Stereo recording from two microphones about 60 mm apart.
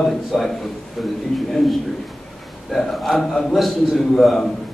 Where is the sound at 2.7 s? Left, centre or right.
Centre.